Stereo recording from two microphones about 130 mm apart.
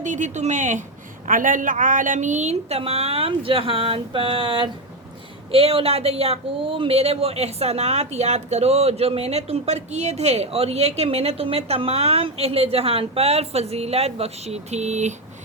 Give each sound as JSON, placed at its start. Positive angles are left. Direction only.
{"t": 0.0, "sound": "speech", "side_deg": -75}
{"t": 1.3, "sound": "speech", "side_deg": -90}